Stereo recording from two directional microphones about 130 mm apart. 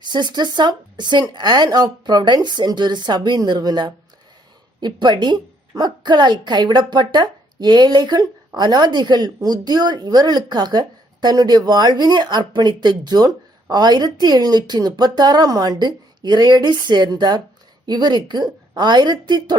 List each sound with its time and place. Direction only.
0.0 s a woman's voice: 35° right (ahead or behind)